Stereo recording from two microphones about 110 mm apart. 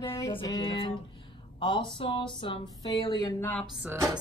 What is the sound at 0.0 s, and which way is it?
Music, 25° left (ahead or behind).